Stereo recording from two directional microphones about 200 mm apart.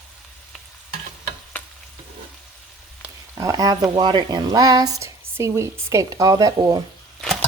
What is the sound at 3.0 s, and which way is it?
Speech, 15° right (ahead or behind).